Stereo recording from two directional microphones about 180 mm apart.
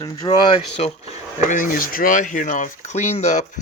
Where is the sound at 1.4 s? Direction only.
45° left (ahead or behind).